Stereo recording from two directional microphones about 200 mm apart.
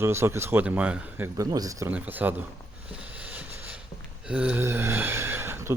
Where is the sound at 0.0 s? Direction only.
15° right (ahead or behind).